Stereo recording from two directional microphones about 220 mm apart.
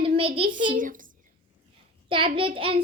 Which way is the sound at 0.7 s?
35° right (ahead or behind).